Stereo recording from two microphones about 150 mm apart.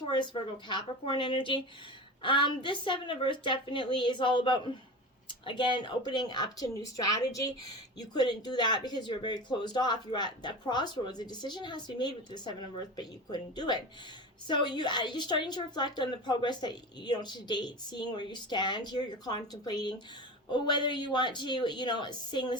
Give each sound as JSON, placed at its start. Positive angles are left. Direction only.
{"t": 0.0, "sound": "a woman's voice", "side_deg": 30}